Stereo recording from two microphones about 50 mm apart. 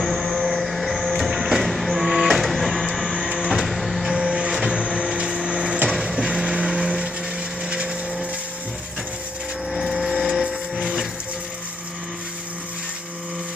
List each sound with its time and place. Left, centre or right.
0.0 s vehicle: centre
3.3 s music: centre
4.1 s printer: centre
5.9 s music: centre
6.1 s vehicle: centre
7.7 s a sound: right
9.7 s a sound: centre
10.4 s printer: centre